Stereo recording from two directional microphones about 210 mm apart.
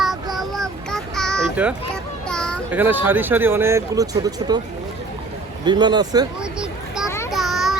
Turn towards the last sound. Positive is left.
turn(degrees=0)  # may be behind; listen again after turning